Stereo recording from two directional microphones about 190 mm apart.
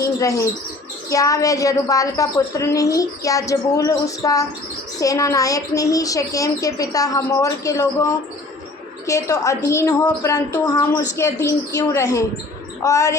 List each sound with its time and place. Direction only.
0.0 s a woman's voice: 15° left (ahead or behind)